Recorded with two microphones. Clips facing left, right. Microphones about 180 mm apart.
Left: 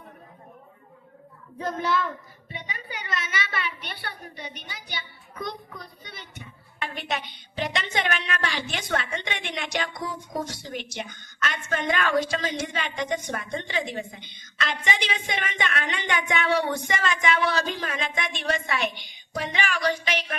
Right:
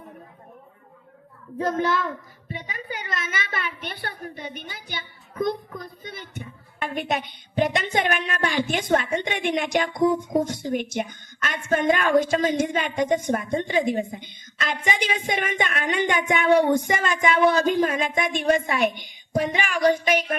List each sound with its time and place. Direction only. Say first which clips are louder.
1.5 s a woman's voice: right 3 dB; 45° right (ahead or behind)